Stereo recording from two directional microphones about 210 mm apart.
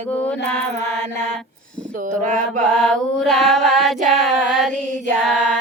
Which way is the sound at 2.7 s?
5° left (ahead or behind).